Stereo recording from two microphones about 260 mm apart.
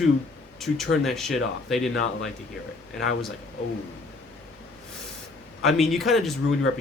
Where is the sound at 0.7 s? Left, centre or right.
Left.